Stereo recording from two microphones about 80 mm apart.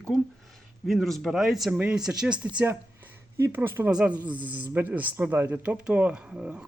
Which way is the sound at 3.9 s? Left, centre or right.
Centre.